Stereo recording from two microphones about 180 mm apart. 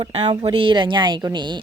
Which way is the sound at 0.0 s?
35° right (ahead or behind).